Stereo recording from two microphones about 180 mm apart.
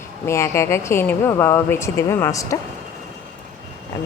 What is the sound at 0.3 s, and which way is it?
Speech, 15° left (ahead or behind).